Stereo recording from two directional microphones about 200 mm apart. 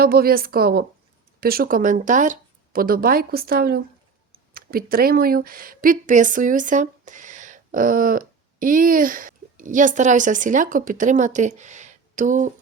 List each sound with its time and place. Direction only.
0.0 s a woman's voice: 50° right (ahead or behind)